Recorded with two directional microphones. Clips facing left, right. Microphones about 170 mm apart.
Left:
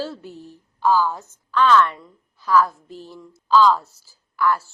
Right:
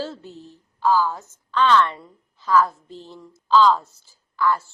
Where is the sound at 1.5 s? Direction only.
5° left (ahead or behind).